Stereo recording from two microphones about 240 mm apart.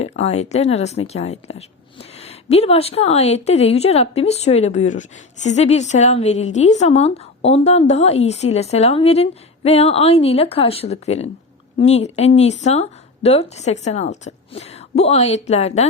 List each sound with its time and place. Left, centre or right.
0.0 s speech: left